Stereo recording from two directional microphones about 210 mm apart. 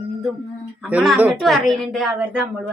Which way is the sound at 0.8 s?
5° right (ahead or behind).